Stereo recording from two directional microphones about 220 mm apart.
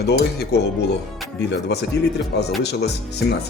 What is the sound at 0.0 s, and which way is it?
Speech, 45° left (ahead or behind).